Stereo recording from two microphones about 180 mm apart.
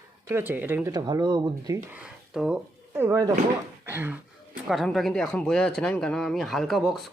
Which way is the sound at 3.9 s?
10° right (ahead or behind).